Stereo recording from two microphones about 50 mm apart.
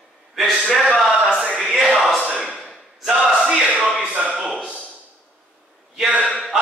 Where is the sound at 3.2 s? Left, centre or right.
Centre.